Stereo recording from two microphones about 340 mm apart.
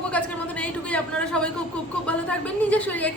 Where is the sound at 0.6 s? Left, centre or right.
Centre.